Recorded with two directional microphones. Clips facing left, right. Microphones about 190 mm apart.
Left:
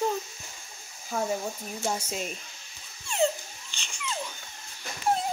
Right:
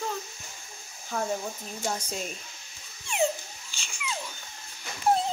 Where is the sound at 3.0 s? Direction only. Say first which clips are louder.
Left 1 dB; 15° right (ahead or behind).